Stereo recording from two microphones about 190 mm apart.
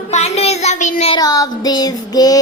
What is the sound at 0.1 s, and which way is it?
Child singing, 35° left (ahead or behind).